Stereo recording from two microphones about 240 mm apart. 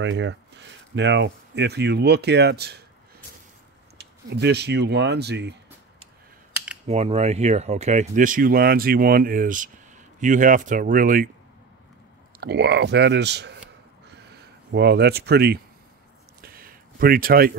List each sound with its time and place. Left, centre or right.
0.0 s speech: right
4.0 s speech: right
6.9 s speech: right
12.4 s speech: right
16.3 s a sound: right